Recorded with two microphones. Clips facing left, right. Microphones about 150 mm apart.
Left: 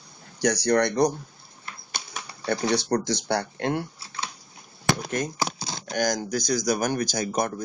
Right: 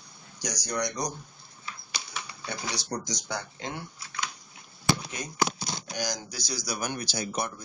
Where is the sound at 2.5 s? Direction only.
60° left (ahead or behind).